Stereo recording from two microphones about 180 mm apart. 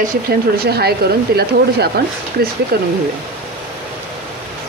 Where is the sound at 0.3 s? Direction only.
60° right (ahead or behind).